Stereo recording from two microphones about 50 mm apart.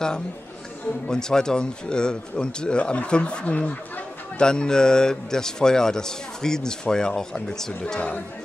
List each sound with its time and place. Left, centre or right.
1.0 s a man's voice: centre
7.8 s speech: left